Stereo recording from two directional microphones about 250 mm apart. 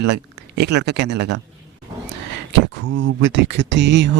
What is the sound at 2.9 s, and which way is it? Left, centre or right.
Speech, right.